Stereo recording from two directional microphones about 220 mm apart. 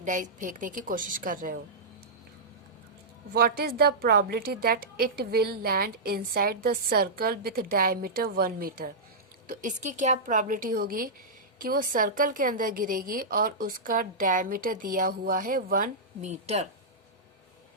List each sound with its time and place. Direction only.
0.0 s a woman's voice: 35° right (ahead or behind)
3.3 s a woman's voice: 45° right (ahead or behind)